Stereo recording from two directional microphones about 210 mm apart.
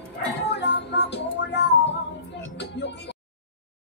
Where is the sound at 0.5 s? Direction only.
55° left (ahead or behind).